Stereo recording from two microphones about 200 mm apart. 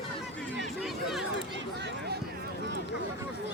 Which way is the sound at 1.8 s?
55° right (ahead or behind).